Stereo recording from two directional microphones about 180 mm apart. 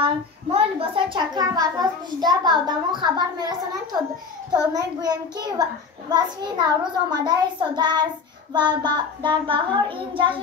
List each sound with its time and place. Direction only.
0.0 s a child's voice: 30° right (ahead or behind)